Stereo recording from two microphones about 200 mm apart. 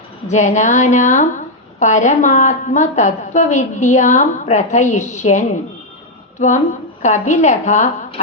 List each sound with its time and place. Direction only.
0.3 s a woman's voice: 35° left (ahead or behind)